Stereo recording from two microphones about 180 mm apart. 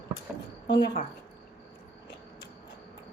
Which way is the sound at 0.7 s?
65° left (ahead or behind).